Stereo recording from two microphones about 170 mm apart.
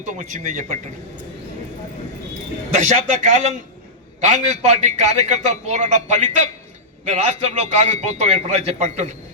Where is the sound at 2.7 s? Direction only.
45° right (ahead or behind).